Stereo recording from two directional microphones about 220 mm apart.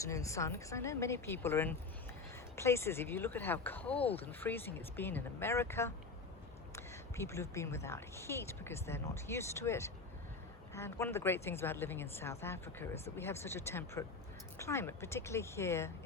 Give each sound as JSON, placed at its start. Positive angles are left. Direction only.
{"t": 0.0, "sound": "a woman's voice", "side_deg": 15}